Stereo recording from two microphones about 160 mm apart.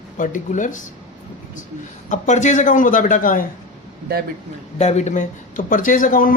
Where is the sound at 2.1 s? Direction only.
50° left (ahead or behind).